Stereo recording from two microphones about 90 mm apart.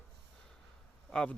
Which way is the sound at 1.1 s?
10° left (ahead or behind).